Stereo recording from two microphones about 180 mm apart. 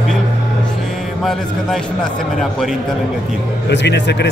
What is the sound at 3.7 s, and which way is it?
Speech, 75° left (ahead or behind).